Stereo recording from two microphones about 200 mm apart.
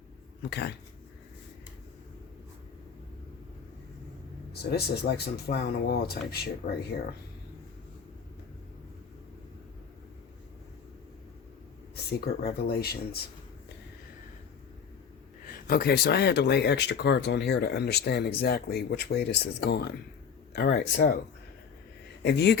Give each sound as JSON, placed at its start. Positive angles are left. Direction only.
{"t": 0.5, "sound": "speech", "side_deg": 55}
{"t": 4.6, "sound": "speech", "side_deg": 55}
{"t": 12.2, "sound": "speech", "side_deg": 50}
{"t": 15.4, "sound": "speech", "side_deg": 50}
{"t": 22.2, "sound": "speech", "side_deg": 55}